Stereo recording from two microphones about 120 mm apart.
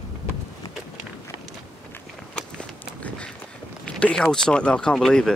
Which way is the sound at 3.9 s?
10° left (ahead or behind).